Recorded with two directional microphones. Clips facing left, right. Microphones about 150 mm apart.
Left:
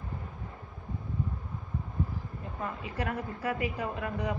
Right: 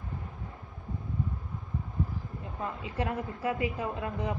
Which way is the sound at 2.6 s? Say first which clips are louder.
Right 1 dB; 25° right (ahead or behind).